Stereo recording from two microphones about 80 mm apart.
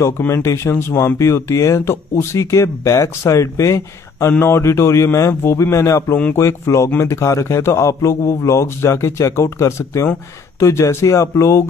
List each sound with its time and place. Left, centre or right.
0.3 s a man's voice: left